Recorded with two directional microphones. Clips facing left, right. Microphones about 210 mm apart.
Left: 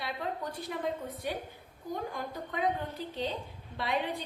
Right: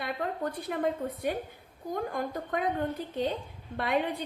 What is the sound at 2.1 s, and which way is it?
Speech, 55° right (ahead or behind).